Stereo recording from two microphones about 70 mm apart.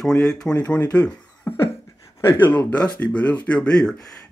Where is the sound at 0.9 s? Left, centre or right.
Centre.